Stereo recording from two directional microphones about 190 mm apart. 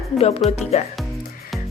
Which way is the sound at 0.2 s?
35° left (ahead or behind).